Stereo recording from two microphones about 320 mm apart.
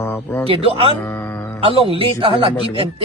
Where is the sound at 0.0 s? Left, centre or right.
Centre.